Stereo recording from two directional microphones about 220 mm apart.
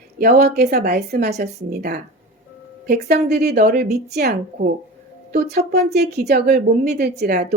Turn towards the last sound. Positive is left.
turn(degrees=-45)  # may be behind; listen again after turning